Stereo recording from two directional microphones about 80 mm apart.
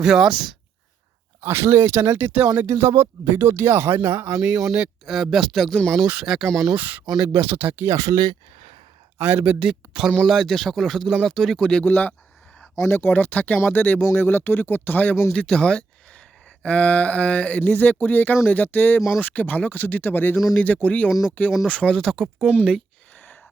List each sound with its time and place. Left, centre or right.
0.0 s speech: centre
1.4 s speech: right
2.1 s speech: right
2.6 s speech: right
4.3 s speech: centre
6.7 s speech: right
7.9 s speech: right
9.1 s speech: right
9.5 s speech: centre
10.2 s speech: centre; by 15.2 s left
15.3 s speech: centre
22.1 s speech: centre